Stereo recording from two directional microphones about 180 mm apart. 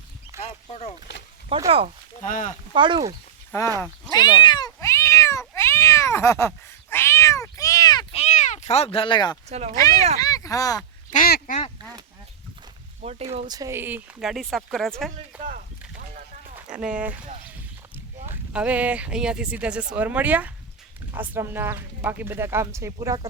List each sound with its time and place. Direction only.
0.4 s speech: 35° left (ahead or behind)
1.5 s speech: 30° right (ahead or behind)
2.2 s speech: 45° left (ahead or behind)
2.7 s speech: 25° right (ahead or behind)
4.1 s cat: 25° left (ahead or behind)
8.1 s cat: 40° left (ahead or behind)
9.5 s speech: 40° right (ahead or behind)
9.7 s speech: 20° left (ahead or behind)
11.1 s quack: 55° left (ahead or behind)
13.0 s speech: 35° right (ahead or behind)
13.5 s speech: 15° right (ahead or behind); by 15.1 s centre (ahead or behind)
15.3 s a sound: 10° right (ahead or behind)
16.6 s speech: 5° right (ahead or behind)
18.3 s speech: 10° right (ahead or behind)